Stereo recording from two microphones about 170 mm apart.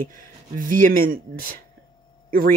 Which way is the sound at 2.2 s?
55° right (ahead or behind).